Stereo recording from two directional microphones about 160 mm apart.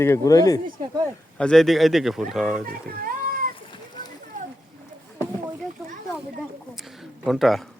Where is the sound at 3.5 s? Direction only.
30° left (ahead or behind).